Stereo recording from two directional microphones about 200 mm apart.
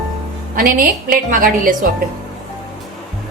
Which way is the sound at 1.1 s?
45° right (ahead or behind).